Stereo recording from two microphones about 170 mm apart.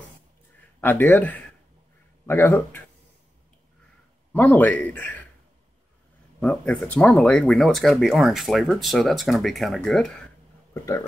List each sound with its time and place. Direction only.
0.7 s speech: 10° left (ahead or behind)
4.3 s speech: 10° left (ahead or behind)
6.4 s speech: 5° left (ahead or behind)